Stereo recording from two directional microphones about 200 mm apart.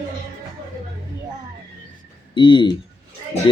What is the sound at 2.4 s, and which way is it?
Speech, 25° left (ahead or behind).